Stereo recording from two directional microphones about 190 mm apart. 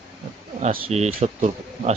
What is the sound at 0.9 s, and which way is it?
Speech, 35° right (ahead or behind).